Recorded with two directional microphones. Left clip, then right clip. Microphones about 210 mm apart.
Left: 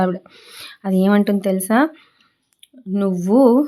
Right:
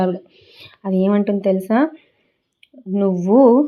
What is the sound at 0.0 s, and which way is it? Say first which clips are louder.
Speech: even; 20° left (ahead or behind).